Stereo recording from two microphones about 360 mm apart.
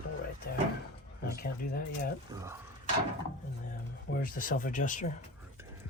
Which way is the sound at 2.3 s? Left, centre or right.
Centre.